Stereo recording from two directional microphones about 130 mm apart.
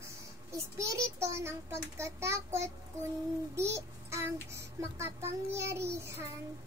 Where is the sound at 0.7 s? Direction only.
20° right (ahead or behind).